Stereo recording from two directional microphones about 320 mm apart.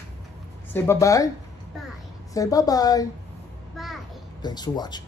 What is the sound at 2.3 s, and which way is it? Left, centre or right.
Speech, centre.